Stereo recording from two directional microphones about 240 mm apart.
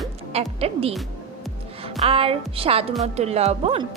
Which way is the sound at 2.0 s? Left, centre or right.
Right.